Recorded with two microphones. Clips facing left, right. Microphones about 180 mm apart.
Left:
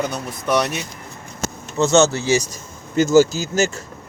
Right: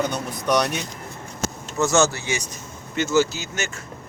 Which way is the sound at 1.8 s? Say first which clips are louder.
Left 4 dB; 20° left (ahead or behind).